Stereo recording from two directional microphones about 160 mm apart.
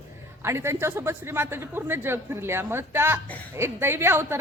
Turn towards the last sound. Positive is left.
turn(degrees=-15)  # may be behind; listen again after turning